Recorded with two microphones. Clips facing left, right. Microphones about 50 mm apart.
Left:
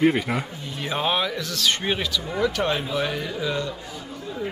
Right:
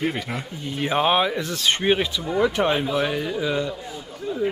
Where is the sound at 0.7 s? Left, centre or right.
Right.